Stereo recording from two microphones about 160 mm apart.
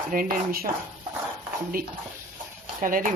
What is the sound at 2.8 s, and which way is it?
Speech, 55° right (ahead or behind).